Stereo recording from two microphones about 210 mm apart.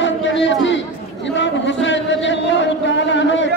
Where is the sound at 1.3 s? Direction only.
60° left (ahead or behind).